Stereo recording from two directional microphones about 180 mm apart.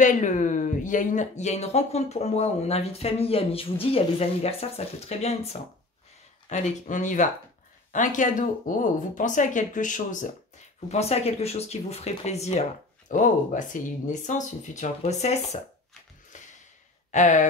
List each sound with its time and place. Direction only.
0.0 s speech: 45° left (ahead or behind)
17.1 s speech: 45° left (ahead or behind)